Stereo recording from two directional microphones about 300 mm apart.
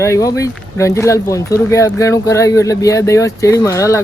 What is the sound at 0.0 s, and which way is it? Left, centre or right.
Speech, centre.